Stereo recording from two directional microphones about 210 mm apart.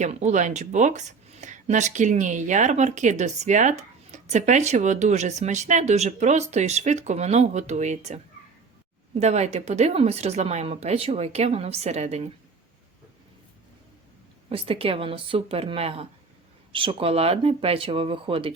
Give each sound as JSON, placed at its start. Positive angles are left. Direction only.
{"t": 0.0, "sound": "speech", "side_deg": -35}
{"t": 14.5, "sound": "speech", "side_deg": -25}